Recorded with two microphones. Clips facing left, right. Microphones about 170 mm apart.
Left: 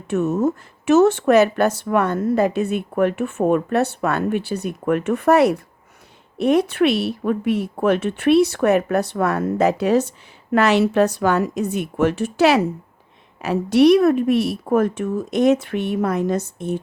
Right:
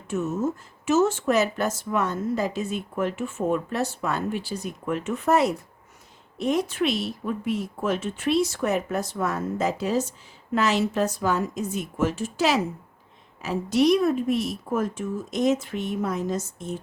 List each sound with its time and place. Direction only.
0.1 s speech: 65° left (ahead or behind)